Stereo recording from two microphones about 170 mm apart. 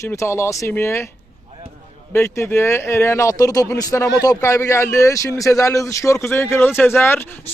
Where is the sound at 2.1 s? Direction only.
15° left (ahead or behind).